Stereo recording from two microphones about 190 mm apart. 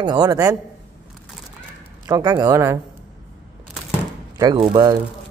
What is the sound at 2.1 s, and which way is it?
Speech, 20° right (ahead or behind).